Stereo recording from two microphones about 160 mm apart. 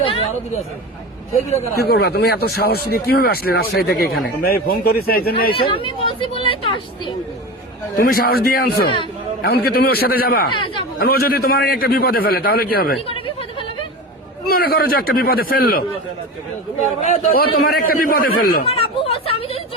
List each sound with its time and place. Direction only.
0.0 s a sound: 40° left (ahead or behind)
1.7 s speech: 80° left
5.7 s speech: 35° left (ahead or behind)
7.9 s speech: 65° left (ahead or behind)
14.4 s speech: 70° left (ahead or behind)
17.0 s a man's voice: 45° left (ahead or behind)
17.3 s a man's voice: 65° left (ahead or behind)
18.6 s speech: 35° left (ahead or behind)